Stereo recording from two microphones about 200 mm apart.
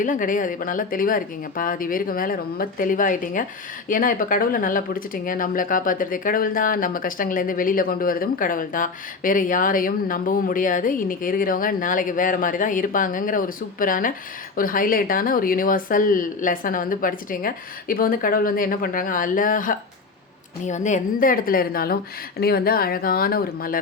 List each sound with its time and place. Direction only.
0.0 s speech: 40° left (ahead or behind)